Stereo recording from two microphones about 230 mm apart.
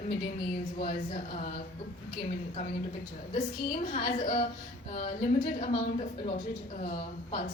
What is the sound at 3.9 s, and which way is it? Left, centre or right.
A woman's voice, left.